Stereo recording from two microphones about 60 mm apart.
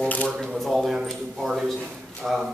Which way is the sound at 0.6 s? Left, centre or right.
Centre.